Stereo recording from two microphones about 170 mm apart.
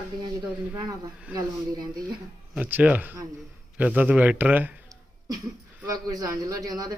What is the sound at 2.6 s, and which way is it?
A man's voice, 10° right (ahead or behind).